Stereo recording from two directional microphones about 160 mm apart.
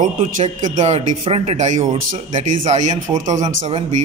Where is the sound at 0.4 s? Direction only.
50° right (ahead or behind).